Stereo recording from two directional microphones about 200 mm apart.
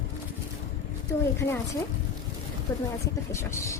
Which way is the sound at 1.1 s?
15° left (ahead or behind).